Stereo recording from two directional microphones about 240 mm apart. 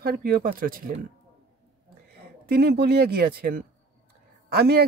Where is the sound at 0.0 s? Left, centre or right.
Right.